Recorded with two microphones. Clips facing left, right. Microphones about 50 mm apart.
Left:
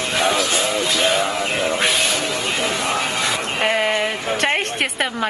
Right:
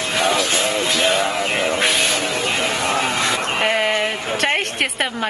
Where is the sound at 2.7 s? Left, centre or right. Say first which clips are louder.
Right 2 dB; right.